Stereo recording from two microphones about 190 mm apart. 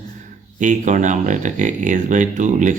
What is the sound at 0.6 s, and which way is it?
A man's voice, 40° right (ahead or behind).